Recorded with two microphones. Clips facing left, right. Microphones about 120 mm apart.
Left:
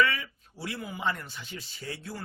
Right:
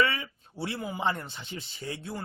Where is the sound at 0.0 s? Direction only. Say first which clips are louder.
Even; 25° right (ahead or behind).